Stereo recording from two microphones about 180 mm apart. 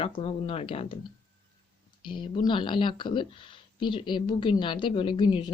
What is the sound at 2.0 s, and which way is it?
Speech, 25° left (ahead or behind).